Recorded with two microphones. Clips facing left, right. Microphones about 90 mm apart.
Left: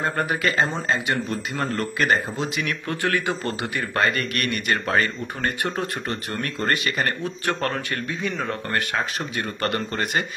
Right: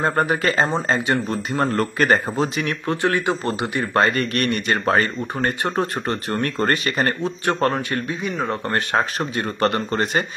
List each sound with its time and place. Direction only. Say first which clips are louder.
0.0 s speech: right 4 dB; 35° right (ahead or behind)
1.8 s speech: right 2 dB; 40° right (ahead or behind); by 8.5 s 20° right (ahead or behind)
8.6 s speech: right 5 dB; 35° right (ahead or behind)